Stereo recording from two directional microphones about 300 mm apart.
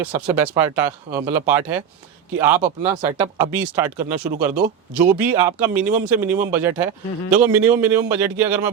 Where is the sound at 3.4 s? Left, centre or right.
Centre.